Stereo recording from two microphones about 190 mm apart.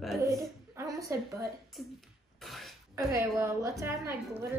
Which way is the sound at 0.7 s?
15° right (ahead or behind).